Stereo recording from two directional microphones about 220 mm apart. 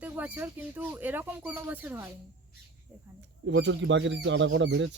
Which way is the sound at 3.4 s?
60° right (ahead or behind).